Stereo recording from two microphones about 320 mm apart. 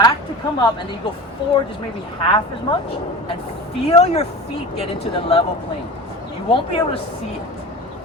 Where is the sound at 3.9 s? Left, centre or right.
Centre.